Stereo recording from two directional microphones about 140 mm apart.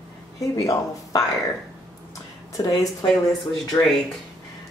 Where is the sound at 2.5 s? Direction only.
25° left (ahead or behind).